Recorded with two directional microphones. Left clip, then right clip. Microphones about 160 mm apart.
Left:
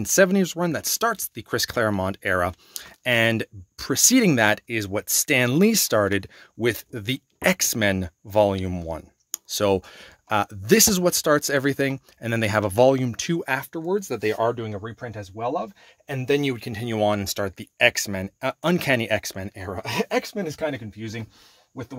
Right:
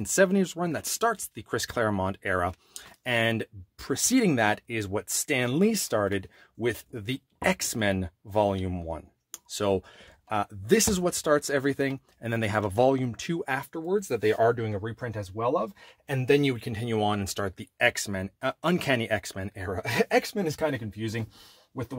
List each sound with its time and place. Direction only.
0.0 s speech: 45° left (ahead or behind)
14.4 s speech: 10° left (ahead or behind)
16.3 s speech: 20° left (ahead or behind); by 21.3 s 5° right (ahead or behind)